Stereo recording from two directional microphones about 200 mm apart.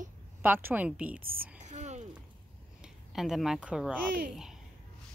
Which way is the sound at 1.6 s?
35° right (ahead or behind).